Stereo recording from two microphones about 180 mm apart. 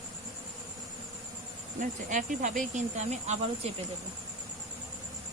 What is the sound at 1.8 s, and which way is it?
Speech, 45° right (ahead or behind).